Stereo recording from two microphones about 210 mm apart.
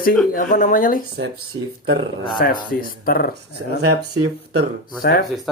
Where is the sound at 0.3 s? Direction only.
40° left (ahead or behind).